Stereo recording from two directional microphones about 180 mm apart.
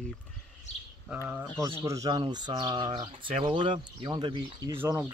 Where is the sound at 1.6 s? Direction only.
15° right (ahead or behind).